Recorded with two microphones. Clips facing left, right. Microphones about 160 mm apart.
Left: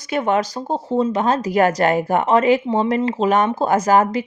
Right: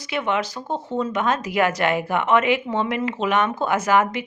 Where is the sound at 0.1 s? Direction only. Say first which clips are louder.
Left 5 dB; 40° left (ahead or behind).